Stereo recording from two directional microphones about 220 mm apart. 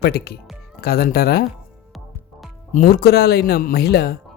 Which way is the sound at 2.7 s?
45° left (ahead or behind).